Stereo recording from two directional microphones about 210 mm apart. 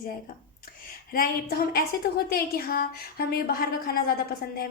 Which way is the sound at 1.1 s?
45° left (ahead or behind).